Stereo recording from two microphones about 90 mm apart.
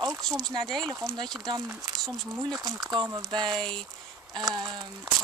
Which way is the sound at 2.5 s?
45° right (ahead or behind).